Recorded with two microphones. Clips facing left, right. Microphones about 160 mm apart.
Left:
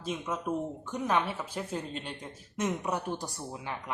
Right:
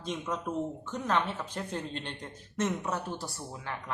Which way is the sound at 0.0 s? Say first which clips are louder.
Even; 5° left (ahead or behind).